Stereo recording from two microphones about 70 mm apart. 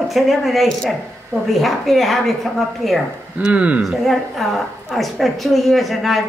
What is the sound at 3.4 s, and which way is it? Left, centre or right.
Speech, centre.